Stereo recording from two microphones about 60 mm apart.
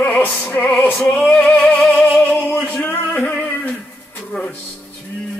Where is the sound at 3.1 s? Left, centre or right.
Centre.